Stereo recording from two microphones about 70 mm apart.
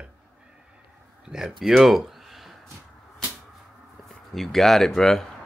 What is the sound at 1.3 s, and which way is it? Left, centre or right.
Speech, centre.